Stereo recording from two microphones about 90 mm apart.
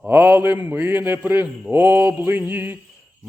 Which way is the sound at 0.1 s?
25° right (ahead or behind).